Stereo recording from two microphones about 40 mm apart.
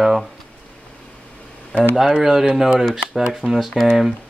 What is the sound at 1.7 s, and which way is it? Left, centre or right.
Speech, left.